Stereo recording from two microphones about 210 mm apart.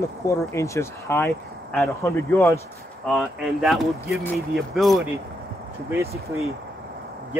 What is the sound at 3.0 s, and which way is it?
Speech, centre (ahead or behind).